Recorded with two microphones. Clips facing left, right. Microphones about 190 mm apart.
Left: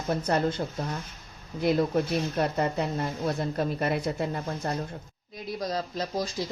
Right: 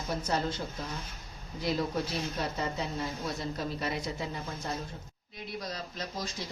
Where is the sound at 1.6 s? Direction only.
55° left (ahead or behind).